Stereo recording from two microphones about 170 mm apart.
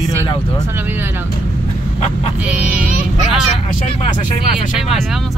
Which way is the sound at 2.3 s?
5° right (ahead or behind).